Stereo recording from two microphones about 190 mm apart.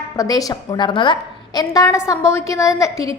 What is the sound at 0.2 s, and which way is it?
A woman's voice, 20° left (ahead or behind).